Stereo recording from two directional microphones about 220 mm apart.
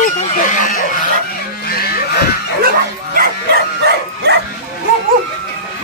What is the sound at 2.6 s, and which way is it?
Bow-wow, 40° right (ahead or behind).